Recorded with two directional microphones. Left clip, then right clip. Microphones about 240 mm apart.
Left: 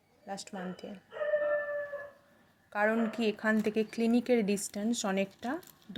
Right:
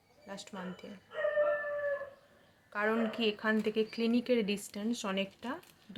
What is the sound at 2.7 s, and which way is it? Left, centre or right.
Speech, centre.